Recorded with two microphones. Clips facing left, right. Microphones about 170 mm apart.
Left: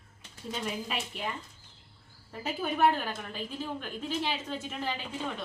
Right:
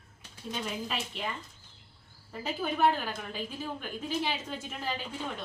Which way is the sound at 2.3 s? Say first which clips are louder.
Even; 5° left (ahead or behind).